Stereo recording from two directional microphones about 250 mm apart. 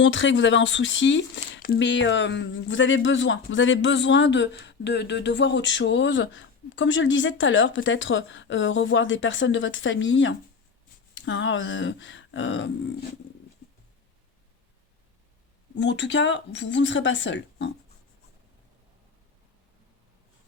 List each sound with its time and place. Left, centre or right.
0.0 s speech: left
15.7 s speech: left